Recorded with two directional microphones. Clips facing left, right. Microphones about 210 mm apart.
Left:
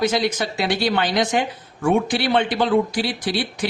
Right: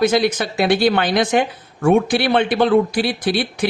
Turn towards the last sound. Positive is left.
turn(degrees=-60)  # may be behind; listen again after turning